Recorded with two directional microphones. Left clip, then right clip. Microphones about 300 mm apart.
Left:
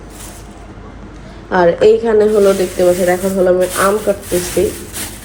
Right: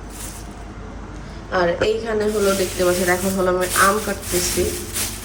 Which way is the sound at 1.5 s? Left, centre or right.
Centre.